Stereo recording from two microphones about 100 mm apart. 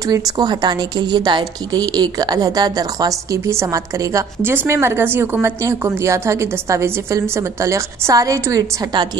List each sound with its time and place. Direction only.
0.4 s a woman's voice: 45° right (ahead or behind)
4.4 s a woman's voice: 25° right (ahead or behind)